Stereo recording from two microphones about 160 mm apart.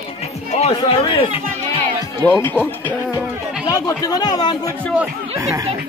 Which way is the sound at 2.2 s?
10° left (ahead or behind).